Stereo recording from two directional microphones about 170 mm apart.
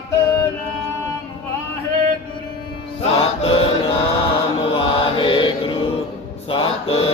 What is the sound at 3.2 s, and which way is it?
Choir, 35° left (ahead or behind).